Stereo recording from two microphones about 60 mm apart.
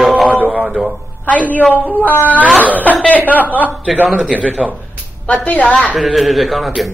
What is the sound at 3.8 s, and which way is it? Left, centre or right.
Speech, right.